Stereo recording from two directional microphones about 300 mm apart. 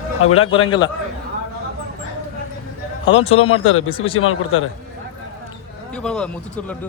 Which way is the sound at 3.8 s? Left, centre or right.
Centre.